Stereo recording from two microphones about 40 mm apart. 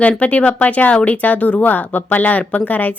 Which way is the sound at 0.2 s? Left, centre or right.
Left.